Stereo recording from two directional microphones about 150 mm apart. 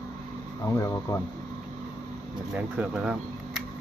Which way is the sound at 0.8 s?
20° left (ahead or behind).